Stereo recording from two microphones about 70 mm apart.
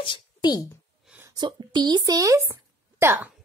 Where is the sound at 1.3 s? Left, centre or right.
Right.